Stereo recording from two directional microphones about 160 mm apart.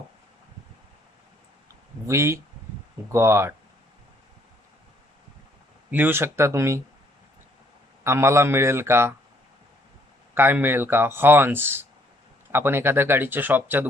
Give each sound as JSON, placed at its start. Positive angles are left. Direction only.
{"t": 2.0, "sound": "speech", "side_deg": -15}
{"t": 5.9, "sound": "speech", "side_deg": -10}
{"t": 8.0, "sound": "speech", "side_deg": -15}
{"t": 10.3, "sound": "speech", "side_deg": -15}